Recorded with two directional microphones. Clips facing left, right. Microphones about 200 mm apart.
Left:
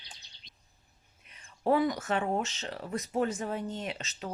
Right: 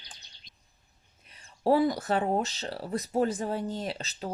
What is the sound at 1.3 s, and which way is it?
Speech, 35° right (ahead or behind).